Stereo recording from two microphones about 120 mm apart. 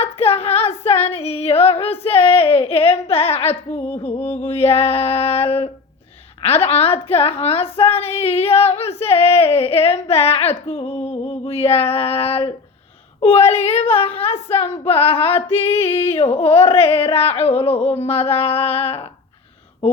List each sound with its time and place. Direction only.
0.0 s child singing: 55° left (ahead or behind)
0.9 s female singing: 55° left (ahead or behind)
3.9 s a woman's voice: 55° left (ahead or behind)
15.9 s a sound: 20° left (ahead or behind)
16.1 s a woman's voice: 55° left (ahead or behind)